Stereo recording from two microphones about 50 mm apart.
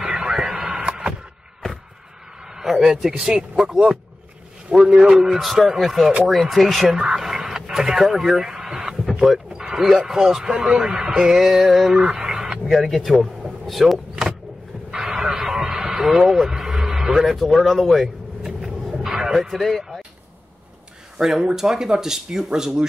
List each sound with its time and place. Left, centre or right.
0.0 s radio: centre
2.4 s a man's voice: centre
4.8 s a man's voice: centre
5.2 s speech: centre
7.2 s a sound: centre
8.9 s a sound: centre
9.3 s speech: centre
14.9 s vehicle: centre
21.2 s speech: centre